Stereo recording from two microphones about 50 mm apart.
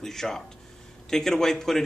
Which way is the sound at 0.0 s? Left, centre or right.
Centre.